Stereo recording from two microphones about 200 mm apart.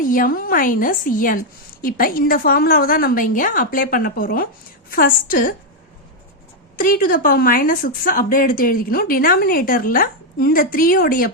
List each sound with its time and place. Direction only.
0.0 s a woman's voice: 45° left (ahead or behind)
6.7 s a woman's voice: 45° left (ahead or behind)